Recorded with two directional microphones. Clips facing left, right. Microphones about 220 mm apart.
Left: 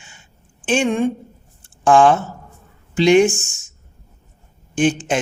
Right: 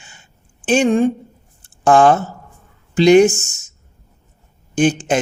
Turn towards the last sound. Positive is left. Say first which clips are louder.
# right 2 dB
turn(degrees=-40)  # may be behind; listen again after turning